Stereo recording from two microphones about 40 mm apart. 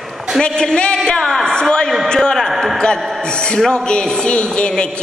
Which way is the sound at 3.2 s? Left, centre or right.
Left.